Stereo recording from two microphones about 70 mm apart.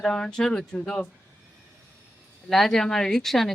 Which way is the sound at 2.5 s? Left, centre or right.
Centre.